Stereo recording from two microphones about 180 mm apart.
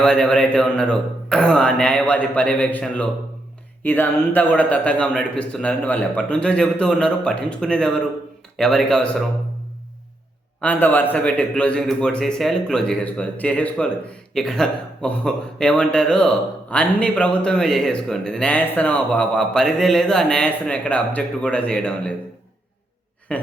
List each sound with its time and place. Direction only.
0.0 s a man's voice: 5° left (ahead or behind)
10.6 s a man's voice: 10° left (ahead or behind)
23.3 s a man's voice: 5° left (ahead or behind)